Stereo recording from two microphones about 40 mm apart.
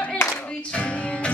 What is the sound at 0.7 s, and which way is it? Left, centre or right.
Music, left.